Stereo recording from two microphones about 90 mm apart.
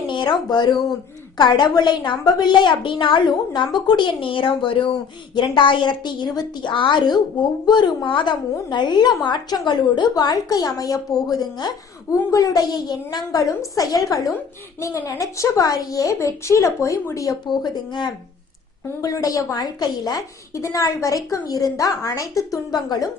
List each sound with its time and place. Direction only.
0.1 s a woman's voice: 60° left (ahead or behind); by 17.3 s 35° left (ahead or behind)
17.5 s a woman's voice: 55° left (ahead or behind)
19.0 s speech: 40° left (ahead or behind)
19.5 s a woman's voice: 50° left (ahead or behind)
20.5 s speech: 35° left (ahead or behind)